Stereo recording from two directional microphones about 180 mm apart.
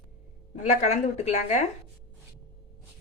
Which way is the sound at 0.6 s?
40° left (ahead or behind).